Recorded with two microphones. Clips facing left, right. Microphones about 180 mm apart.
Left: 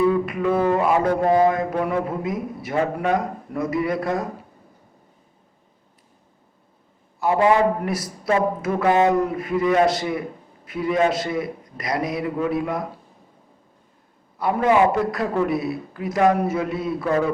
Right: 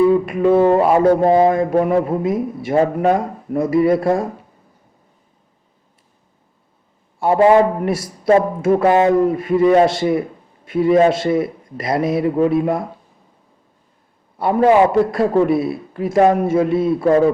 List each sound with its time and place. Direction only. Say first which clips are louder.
0.0 s a man's voice: right 6 dB; 25° right (ahead or behind)
7.2 s a man's voice: right 6 dB; 30° right (ahead or behind)
14.3 s a man's voice: right 5 dB; 30° right (ahead or behind)